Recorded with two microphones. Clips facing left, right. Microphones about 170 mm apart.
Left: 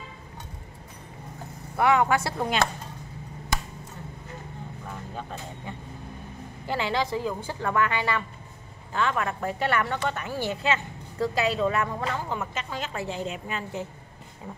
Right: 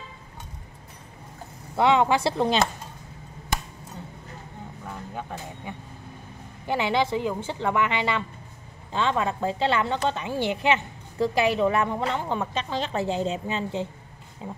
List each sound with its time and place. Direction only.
1.8 s a woman's voice: 25° right (ahead or behind)
6.6 s a woman's voice: 20° right (ahead or behind)